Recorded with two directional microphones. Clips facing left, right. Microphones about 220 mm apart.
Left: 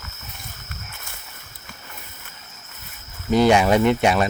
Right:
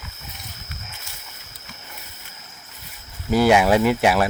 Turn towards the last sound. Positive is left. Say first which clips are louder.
# even
turn(degrees=-5)  # may be behind; listen again after turning